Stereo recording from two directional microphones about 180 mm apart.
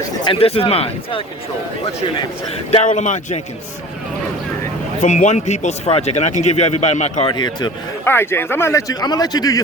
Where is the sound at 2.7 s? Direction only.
40° left (ahead or behind).